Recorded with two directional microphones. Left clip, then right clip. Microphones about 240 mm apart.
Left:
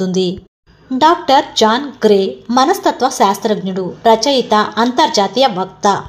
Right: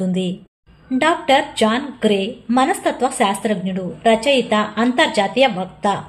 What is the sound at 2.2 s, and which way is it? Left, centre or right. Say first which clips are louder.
A woman's voice: left 5 dB; centre.